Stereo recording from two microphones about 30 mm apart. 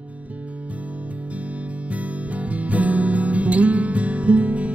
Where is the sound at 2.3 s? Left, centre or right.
Right.